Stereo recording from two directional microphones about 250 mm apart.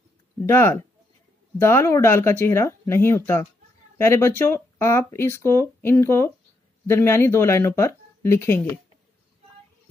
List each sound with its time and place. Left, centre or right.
0.4 s speech: centre